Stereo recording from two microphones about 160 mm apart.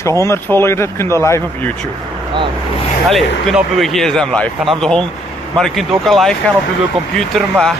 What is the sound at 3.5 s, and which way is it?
Speech, centre (ahead or behind).